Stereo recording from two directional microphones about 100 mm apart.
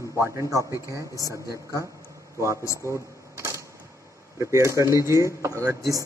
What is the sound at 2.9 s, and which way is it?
Cash register, 30° right (ahead or behind).